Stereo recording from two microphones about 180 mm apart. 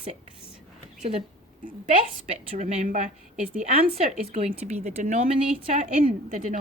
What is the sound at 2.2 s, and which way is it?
Speech, 35° right (ahead or behind).